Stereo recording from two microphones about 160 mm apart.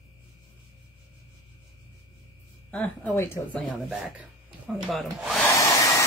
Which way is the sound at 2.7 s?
10° left (ahead or behind).